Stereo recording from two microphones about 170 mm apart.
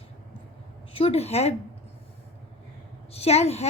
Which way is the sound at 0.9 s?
35° left (ahead or behind).